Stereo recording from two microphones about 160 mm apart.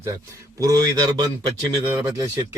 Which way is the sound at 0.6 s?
25° right (ahead or behind).